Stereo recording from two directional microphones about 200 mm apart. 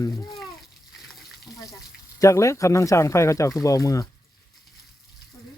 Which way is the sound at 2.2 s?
15° left (ahead or behind).